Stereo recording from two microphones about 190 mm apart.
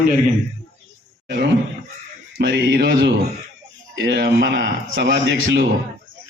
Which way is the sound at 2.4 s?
65° right (ahead or behind).